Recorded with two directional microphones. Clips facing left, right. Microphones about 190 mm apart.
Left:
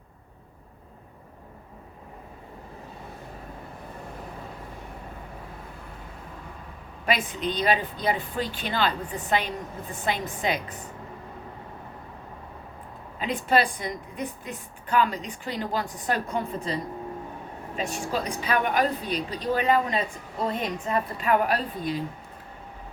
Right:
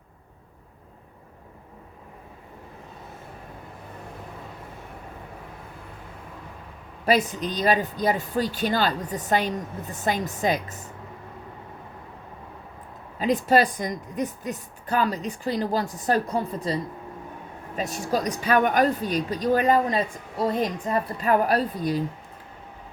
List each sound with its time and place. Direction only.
7.0 s a woman's voice: 40° right (ahead or behind)
13.1 s a woman's voice: 40° right (ahead or behind)
17.7 s a woman's voice: 40° right (ahead or behind)